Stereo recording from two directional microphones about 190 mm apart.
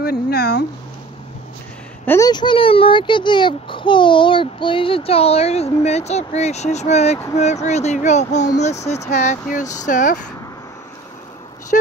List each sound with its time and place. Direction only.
0.0 s speech: 55° left (ahead or behind)
2.0 s a child's voice: 15° left (ahead or behind); by 10.2 s 40° left (ahead or behind)
11.7 s speech: 50° left (ahead or behind)